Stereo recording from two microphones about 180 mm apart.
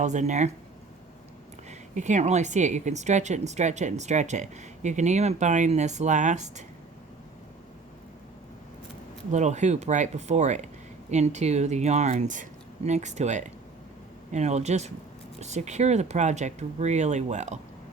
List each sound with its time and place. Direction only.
0.0 s speech: 40° right (ahead or behind)
2.0 s speech: 40° right (ahead or behind)
9.3 s speech: 40° right (ahead or behind)